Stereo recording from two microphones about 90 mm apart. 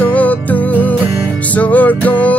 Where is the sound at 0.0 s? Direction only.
15° left (ahead or behind).